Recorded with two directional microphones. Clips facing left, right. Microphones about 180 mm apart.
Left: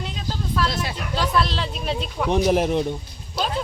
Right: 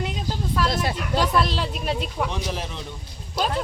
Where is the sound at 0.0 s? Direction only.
10° right (ahead or behind).